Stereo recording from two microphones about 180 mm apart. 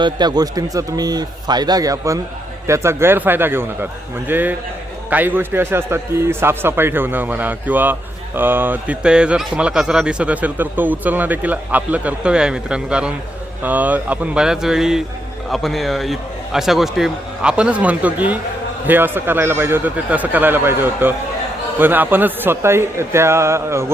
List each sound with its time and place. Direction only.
0.0 s a man's voice: 25° right (ahead or behind)